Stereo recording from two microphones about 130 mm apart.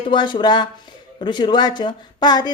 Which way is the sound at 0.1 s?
35° left (ahead or behind).